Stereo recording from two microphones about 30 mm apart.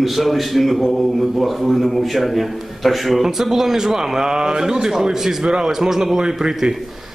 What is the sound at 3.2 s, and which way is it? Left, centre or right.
A man's voice, centre.